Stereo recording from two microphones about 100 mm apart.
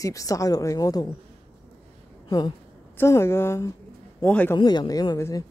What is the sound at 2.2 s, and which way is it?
Speech, 40° left (ahead or behind).